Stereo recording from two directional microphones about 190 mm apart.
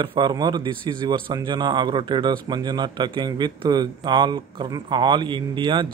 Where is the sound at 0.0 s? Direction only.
25° right (ahead or behind).